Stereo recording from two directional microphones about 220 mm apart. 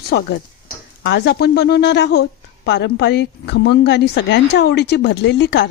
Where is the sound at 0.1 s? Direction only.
50° left (ahead or behind).